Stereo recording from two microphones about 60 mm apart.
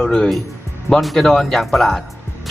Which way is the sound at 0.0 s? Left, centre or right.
Centre.